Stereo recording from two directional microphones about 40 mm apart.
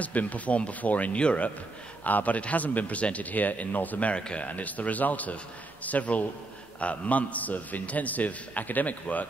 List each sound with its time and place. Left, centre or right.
0.0 s a man's voice: left
2.0 s a man's voice: left